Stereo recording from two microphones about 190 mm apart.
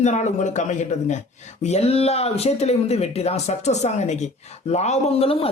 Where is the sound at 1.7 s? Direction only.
30° left (ahead or behind).